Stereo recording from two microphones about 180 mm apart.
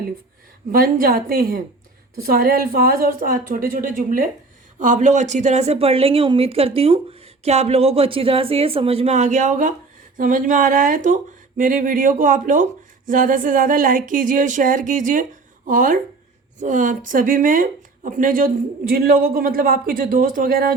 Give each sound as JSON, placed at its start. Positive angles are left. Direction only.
{"t": 0.7, "sound": "a woman's voice", "side_deg": -55}